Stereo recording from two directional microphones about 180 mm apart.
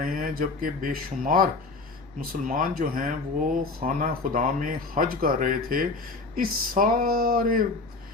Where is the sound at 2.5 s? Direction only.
50° right (ahead or behind).